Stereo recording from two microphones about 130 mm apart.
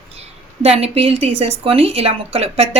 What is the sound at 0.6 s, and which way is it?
A woman's voice, 50° right (ahead or behind).